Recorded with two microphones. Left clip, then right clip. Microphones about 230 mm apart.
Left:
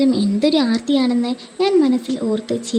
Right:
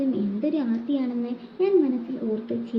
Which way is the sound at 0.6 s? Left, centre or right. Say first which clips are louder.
Left 9 dB; left.